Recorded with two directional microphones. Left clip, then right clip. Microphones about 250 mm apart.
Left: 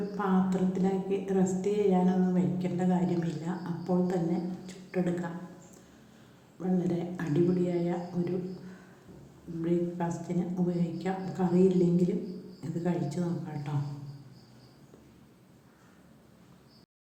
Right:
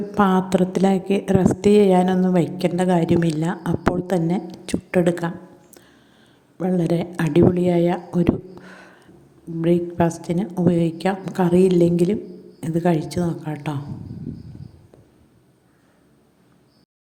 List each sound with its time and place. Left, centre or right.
0.2 s a woman's voice: right
6.6 s a woman's voice: right